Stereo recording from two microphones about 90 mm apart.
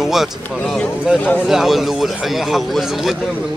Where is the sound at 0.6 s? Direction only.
10° left (ahead or behind).